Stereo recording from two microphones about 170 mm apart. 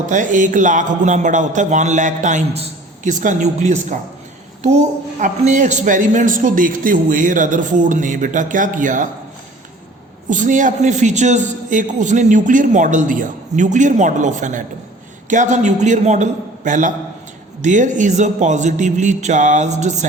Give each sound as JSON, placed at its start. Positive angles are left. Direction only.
{"t": 0.1, "sound": "a man's voice", "side_deg": -50}
{"t": 10.2, "sound": "a man's voice", "side_deg": -50}